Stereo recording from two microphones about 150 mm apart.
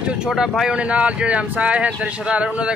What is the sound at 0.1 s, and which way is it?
Speech, 5° right (ahead or behind).